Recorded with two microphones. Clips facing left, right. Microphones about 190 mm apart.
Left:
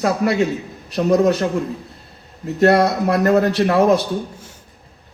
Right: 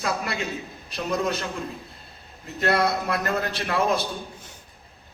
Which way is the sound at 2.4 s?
45° left (ahead or behind).